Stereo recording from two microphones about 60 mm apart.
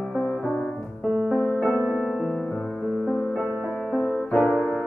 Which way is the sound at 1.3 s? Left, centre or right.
Left.